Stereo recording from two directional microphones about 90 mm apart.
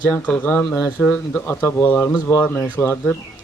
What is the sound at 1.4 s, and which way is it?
Speech, 30° left (ahead or behind).